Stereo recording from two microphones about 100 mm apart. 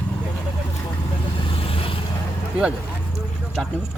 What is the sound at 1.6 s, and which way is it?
Vehicle, 70° left (ahead or behind).